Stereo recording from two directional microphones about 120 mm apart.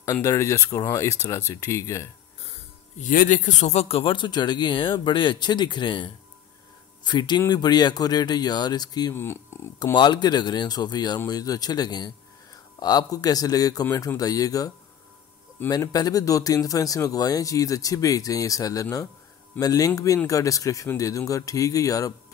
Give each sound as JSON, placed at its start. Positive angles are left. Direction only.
{"t": 0.0, "sound": "speech", "side_deg": 25}
{"t": 3.0, "sound": "speech", "side_deg": 90}
{"t": 9.1, "sound": "speech", "side_deg": 20}
{"t": 9.9, "sound": "speech", "side_deg": 40}
{"t": 15.7, "sound": "speech", "side_deg": 30}